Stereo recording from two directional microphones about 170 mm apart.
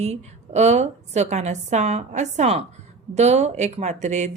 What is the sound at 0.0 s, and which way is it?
A woman's voice, 40° right (ahead or behind).